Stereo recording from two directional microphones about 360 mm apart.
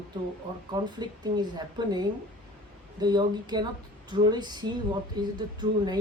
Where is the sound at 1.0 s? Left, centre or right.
Centre.